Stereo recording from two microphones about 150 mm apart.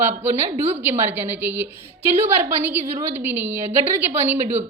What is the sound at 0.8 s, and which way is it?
Speech, 15° right (ahead or behind).